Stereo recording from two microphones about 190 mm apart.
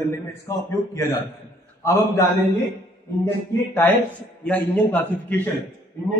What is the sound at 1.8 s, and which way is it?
Speech, 15° left (ahead or behind).